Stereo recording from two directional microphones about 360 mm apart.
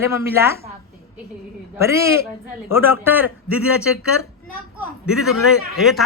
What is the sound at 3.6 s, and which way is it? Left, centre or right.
Speech, left.